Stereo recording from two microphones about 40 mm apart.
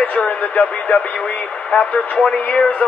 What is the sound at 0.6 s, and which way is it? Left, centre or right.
Speech, left.